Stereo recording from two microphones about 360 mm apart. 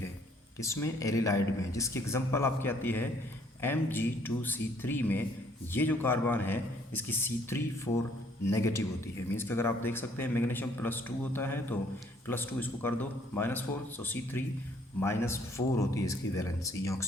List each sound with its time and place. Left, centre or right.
0.6 s a man's voice: centre